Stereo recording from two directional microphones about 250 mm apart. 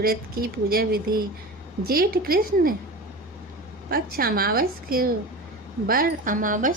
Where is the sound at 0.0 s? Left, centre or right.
Right.